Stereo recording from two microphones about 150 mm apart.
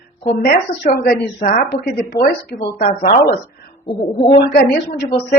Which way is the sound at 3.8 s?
35° left (ahead or behind).